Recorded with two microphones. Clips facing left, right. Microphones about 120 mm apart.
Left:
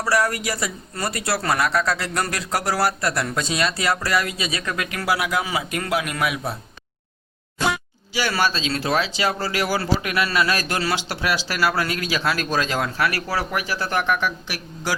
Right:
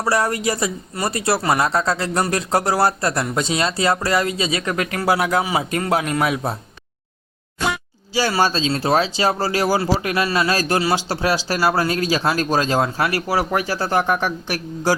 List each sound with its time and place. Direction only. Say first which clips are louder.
0.0 s speech: right 2 dB; 25° right (ahead or behind)
4.9 s speech: right 4 dB; 35° right (ahead or behind)
8.1 s speech: right 4 dB; 30° right (ahead or behind)
13.7 s speech: right 3 dB; 40° right (ahead or behind)